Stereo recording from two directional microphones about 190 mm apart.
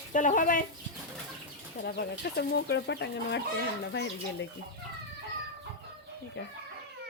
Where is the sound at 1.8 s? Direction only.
60° left (ahead or behind).